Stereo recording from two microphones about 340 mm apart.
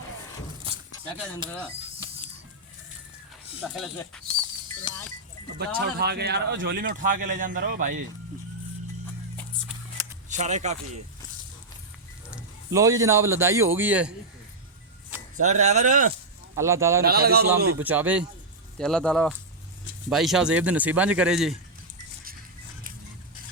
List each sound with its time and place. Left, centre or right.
1.1 s a man's voice: centre
3.6 s a man's voice: centre
5.5 s speech: right
10.2 s speech: right
12.3 s a man's voice: centre
15.4 s speech: right
16.6 s speech: centre
17.0 s speech: right
17.7 s a man's voice: centre